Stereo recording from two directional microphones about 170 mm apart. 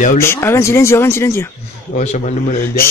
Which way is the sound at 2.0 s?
40° left (ahead or behind).